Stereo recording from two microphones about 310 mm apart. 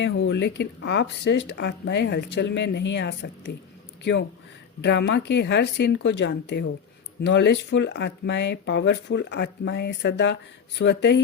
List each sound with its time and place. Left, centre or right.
0.0 s speech: left